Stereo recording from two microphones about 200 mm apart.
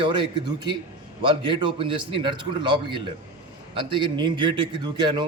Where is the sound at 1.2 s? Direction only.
25° right (ahead or behind).